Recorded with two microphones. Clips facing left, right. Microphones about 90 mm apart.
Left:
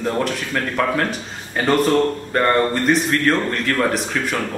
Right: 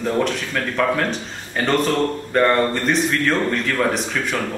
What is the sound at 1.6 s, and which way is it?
A man's voice, 5° left (ahead or behind).